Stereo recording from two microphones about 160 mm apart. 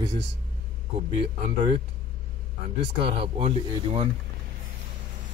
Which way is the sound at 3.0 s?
35° right (ahead or behind).